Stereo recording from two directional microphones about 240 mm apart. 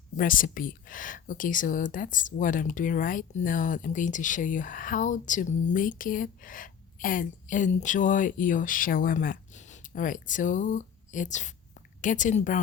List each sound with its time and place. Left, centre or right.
0.2 s speech: left